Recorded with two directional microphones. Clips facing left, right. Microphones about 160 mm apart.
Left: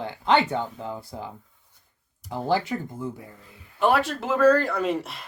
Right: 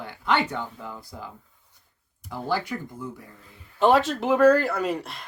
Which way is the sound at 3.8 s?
20° right (ahead or behind).